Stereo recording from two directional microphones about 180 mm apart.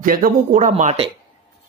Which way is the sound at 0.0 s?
50° right (ahead or behind).